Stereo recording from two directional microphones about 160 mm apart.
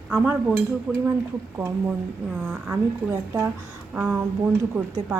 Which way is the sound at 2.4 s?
10° right (ahead or behind).